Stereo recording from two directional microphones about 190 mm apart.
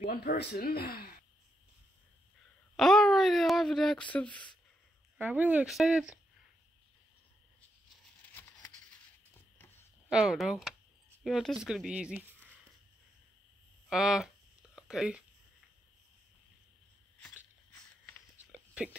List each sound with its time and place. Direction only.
0.0 s speech: 50° left (ahead or behind)
2.7 s speech: 5° left (ahead or behind)
5.1 s speech: 10° right (ahead or behind)
8.3 s a sound: 15° left (ahead or behind)
10.0 s speech: 5° right (ahead or behind)
13.8 s speech: 5° right (ahead or behind)